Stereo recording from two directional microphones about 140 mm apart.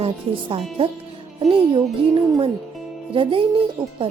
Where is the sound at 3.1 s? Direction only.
40° right (ahead or behind).